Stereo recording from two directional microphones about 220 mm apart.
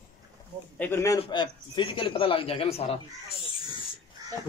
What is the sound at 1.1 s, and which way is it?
Speech, 20° left (ahead or behind).